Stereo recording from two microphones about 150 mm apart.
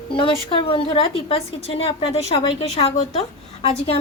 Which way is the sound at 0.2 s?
35° left (ahead or behind).